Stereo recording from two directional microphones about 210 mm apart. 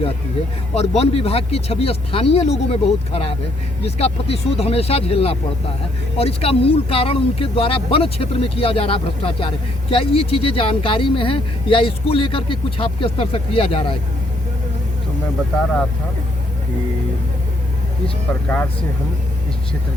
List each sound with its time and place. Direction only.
0.7 s speech: 30° left (ahead or behind)
18.4 s speech: 10° left (ahead or behind)